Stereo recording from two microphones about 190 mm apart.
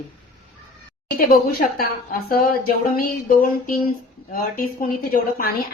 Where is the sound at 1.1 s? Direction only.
50° left (ahead or behind).